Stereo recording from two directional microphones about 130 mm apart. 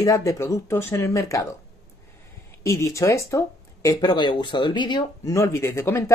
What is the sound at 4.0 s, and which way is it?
Speech, 35° left (ahead or behind).